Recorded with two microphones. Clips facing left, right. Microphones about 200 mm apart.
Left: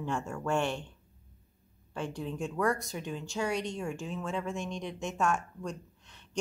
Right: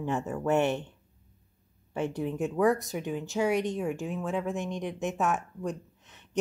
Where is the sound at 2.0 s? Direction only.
20° right (ahead or behind).